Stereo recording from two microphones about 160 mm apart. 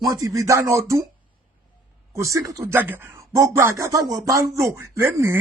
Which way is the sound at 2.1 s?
20° right (ahead or behind).